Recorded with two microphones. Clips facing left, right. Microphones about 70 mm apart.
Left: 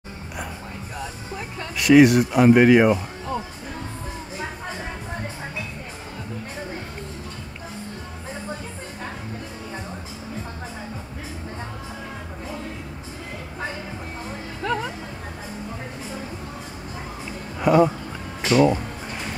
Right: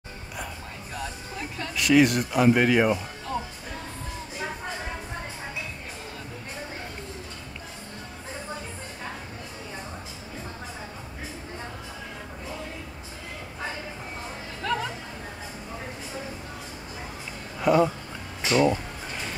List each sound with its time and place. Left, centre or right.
1.8 s speech: centre
14.6 s music: centre
17.7 s music: centre
18.5 s music: centre